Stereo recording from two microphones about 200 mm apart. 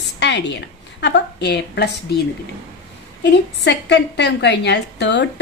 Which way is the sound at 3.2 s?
60° left (ahead or behind).